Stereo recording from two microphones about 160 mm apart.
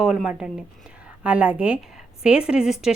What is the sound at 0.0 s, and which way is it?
A woman's voice, 5° right (ahead or behind).